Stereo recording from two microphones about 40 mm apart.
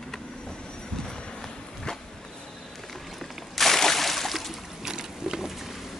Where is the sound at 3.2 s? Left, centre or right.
Centre.